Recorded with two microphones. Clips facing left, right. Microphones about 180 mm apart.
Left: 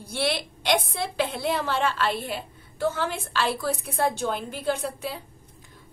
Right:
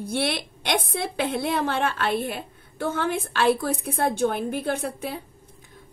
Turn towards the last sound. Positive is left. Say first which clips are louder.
# right 2 dB
turn(degrees=-55)  # may be behind; listen again after turning